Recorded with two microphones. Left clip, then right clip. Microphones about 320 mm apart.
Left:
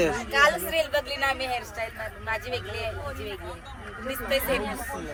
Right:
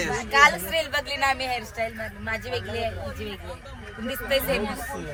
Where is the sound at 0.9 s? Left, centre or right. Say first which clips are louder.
Right 2 dB; centre.